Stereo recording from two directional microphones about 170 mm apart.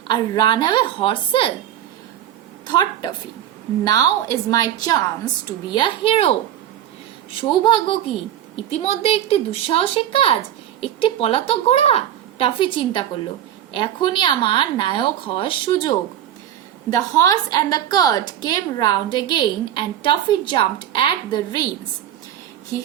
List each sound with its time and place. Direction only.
0.1 s a woman's voice: 25° left (ahead or behind)
2.6 s a woman's voice: 25° left (ahead or behind)
7.6 s a woman's voice: 30° left (ahead or behind)